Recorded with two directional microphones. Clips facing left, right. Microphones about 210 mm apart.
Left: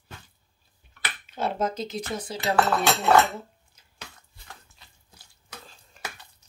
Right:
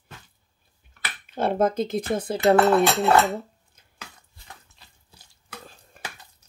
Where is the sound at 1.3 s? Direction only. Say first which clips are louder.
Right 6 dB; 55° right (ahead or behind).